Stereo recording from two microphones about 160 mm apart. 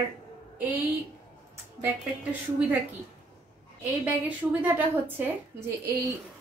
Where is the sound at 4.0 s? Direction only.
10° right (ahead or behind).